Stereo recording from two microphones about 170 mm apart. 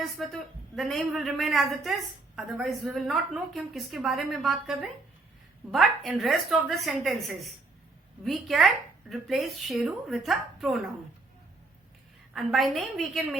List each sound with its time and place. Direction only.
0.0 s a woman's voice: centre (ahead or behind)
12.3 s a woman's voice: centre (ahead or behind)